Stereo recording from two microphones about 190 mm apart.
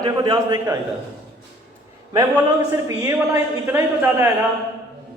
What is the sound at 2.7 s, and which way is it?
A man's voice, 15° right (ahead or behind).